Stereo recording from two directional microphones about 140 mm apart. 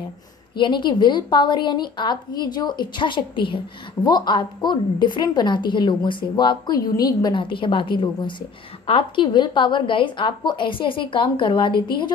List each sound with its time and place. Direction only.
0.6 s a woman's voice: 35° left (ahead or behind)